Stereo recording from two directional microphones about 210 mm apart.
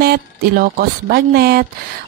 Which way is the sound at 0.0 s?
45° right (ahead or behind).